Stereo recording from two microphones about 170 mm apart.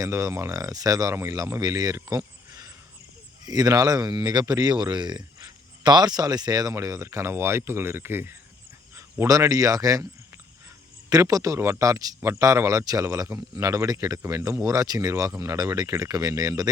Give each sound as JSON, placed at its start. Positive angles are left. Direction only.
{"t": 0.0, "sound": "speech", "side_deg": -15}
{"t": 11.1, "sound": "speech", "side_deg": -20}